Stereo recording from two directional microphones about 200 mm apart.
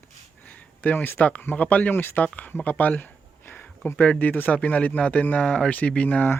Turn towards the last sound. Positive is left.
turn(degrees=5)  # may be behind; listen again after turning